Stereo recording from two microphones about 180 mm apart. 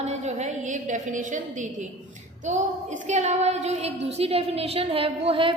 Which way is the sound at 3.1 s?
40° right (ahead or behind).